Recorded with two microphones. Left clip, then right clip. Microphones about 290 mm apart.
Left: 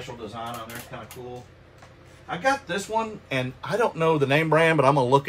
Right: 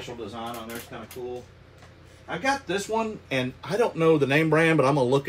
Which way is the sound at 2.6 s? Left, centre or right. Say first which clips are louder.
Even; centre.